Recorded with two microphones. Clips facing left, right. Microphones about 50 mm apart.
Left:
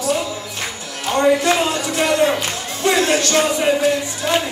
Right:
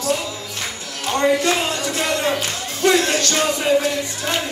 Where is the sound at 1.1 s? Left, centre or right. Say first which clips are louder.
Left 3 dB; left.